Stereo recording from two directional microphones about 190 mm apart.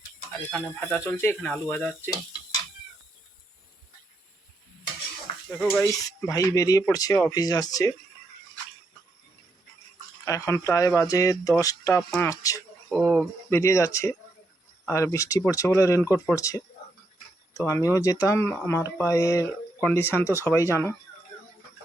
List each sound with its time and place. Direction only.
0.9 s speech: 10° left (ahead or behind)
5.5 s speech: 10° left (ahead or behind)
10.2 s speech: 15° left (ahead or behind)
12.9 s speech: 5° right (ahead or behind)
13.5 s speech: 15° left (ahead or behind)